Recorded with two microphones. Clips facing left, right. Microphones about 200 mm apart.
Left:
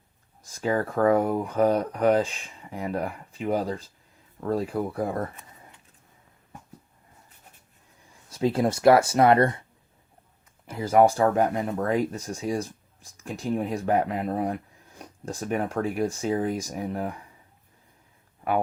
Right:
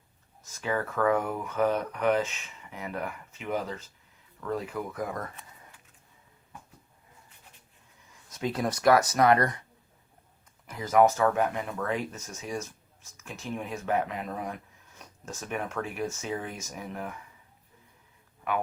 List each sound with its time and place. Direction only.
0.4 s speech: 35° left (ahead or behind)
8.3 s speech: 30° left (ahead or behind)
10.7 s speech: 30° left (ahead or behind)